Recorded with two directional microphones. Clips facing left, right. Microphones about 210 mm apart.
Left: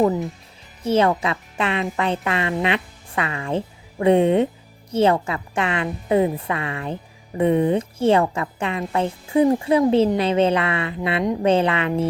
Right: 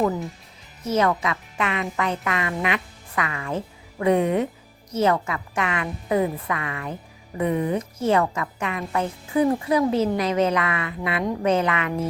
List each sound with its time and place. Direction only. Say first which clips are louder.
0.9 s speech: left 3 dB; 30° left (ahead or behind)